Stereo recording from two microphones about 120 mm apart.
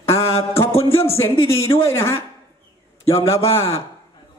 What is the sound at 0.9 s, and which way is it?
A man's voice, 20° left (ahead or behind).